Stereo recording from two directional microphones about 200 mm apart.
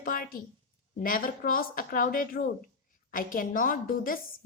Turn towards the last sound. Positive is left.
turn(degrees=45)  # may be behind; listen again after turning